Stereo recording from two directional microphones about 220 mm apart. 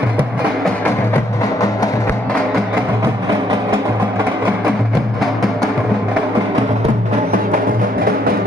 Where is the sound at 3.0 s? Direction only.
15° right (ahead or behind).